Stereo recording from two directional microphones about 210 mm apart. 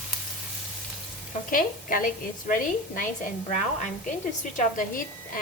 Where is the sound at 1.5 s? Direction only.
40° left (ahead or behind).